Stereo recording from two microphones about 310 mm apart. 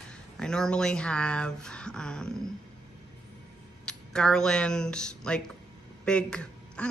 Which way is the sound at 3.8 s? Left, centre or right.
Centre.